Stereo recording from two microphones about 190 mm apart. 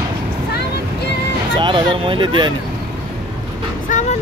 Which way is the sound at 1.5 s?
25° right (ahead or behind).